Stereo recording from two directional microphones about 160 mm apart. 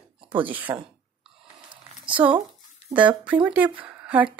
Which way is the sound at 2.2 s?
10° right (ahead or behind).